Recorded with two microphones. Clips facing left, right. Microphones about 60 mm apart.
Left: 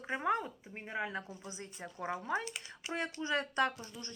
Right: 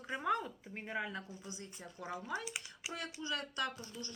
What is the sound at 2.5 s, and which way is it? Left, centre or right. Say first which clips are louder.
Speech: even; centre.